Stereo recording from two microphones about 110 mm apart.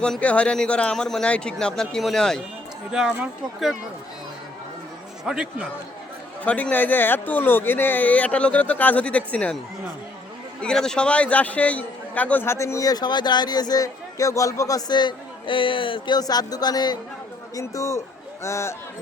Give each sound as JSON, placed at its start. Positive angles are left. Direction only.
{"t": 0.0, "sound": "speech", "side_deg": 10}
{"t": 2.9, "sound": "speech", "side_deg": -10}
{"t": 5.2, "sound": "speech", "side_deg": -5}
{"t": 6.4, "sound": "speech", "side_deg": 10}
{"t": 10.6, "sound": "a man's voice", "side_deg": 5}
{"t": 16.1, "sound": "speech", "side_deg": 35}
{"t": 17.5, "sound": "a man's voice", "side_deg": 30}